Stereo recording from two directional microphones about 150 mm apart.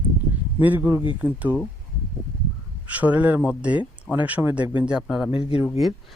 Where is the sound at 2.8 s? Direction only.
10° right (ahead or behind).